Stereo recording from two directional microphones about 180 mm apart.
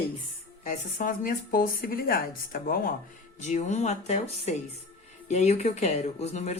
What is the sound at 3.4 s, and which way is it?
A woman's voice, 40° left (ahead or behind).